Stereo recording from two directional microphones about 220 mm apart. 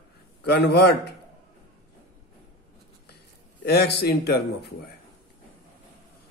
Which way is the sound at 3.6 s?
50° left (ahead or behind).